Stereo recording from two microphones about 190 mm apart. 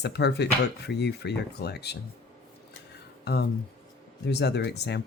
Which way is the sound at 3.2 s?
60° left (ahead or behind).